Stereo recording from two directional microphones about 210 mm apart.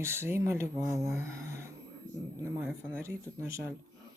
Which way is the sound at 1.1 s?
15° right (ahead or behind).